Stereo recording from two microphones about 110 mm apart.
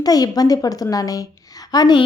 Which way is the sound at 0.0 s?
35° left (ahead or behind).